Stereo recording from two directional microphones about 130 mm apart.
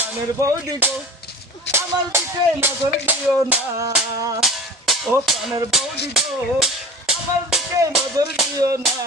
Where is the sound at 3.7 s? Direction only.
25° right (ahead or behind).